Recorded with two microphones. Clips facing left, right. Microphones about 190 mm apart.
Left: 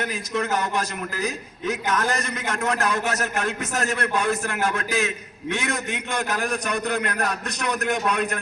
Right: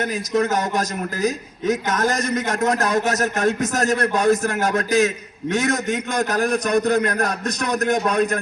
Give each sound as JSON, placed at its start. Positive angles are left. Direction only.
{"t": 0.0, "sound": "a man's voice", "side_deg": -40}